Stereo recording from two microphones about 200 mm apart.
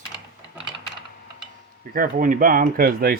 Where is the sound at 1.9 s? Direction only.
40° right (ahead or behind).